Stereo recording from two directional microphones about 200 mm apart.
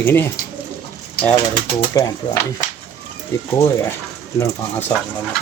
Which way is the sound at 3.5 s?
15° left (ahead or behind).